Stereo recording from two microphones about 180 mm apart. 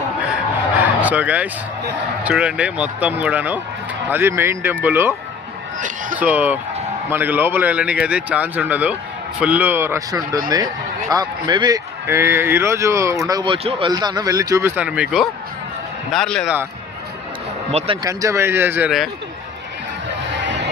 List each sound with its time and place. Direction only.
1.0 s speech: 10° right (ahead or behind)
6.1 s a man's voice: 10° right (ahead or behind)
17.7 s speech: 35° right (ahead or behind)
18.0 s speech: 20° right (ahead or behind)
20.3 s music: 85° right